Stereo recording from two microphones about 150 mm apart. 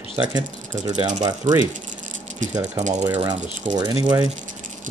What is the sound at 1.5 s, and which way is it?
Speech, 55° right (ahead or behind).